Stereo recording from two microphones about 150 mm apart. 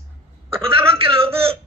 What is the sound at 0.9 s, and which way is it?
Speech, 40° right (ahead or behind).